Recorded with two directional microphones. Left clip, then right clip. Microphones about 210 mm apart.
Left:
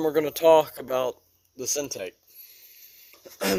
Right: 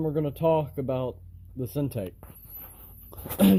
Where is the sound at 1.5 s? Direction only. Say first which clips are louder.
Left 2 dB; 5° left (ahead or behind).